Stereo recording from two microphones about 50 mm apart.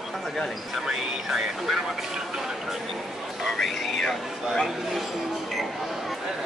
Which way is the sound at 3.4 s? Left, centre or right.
Centre.